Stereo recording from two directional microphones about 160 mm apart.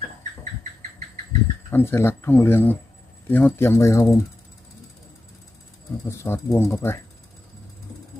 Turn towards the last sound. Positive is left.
turn(degrees=15)  # may be behind; listen again after turning